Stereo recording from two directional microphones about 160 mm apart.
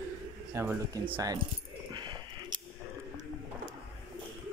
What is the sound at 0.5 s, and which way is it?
Speech, 15° right (ahead or behind).